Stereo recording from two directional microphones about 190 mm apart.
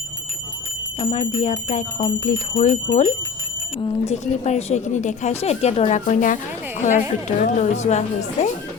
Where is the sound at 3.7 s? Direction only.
25° left (ahead or behind).